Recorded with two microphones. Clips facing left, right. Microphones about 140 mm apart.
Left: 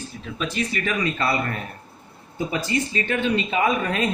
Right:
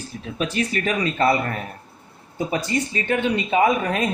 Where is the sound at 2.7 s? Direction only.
20° right (ahead or behind).